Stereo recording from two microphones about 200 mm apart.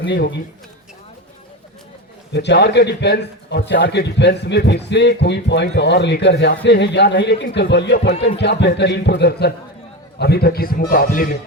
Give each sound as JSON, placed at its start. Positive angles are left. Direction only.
{"t": 0.0, "sound": "a man's voice", "side_deg": 60}
{"t": 2.3, "sound": "a man's voice", "side_deg": 55}